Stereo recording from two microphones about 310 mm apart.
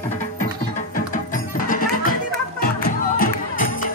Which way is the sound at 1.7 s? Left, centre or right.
Left.